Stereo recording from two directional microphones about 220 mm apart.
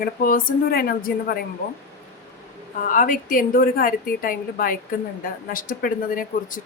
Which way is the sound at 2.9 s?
35° left (ahead or behind).